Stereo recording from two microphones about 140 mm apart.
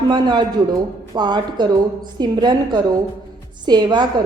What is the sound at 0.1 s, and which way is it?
A woman's voice, 30° right (ahead or behind).